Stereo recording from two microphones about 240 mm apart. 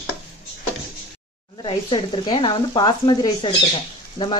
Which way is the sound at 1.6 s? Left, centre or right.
Centre.